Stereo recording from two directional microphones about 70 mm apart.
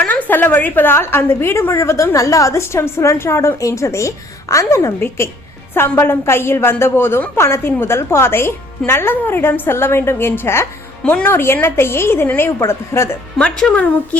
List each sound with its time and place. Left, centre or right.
0.0 s a woman's voice: left
4.9 s a woman's voice: left
11.0 s a woman's voice: left
13.4 s a woman's voice: centre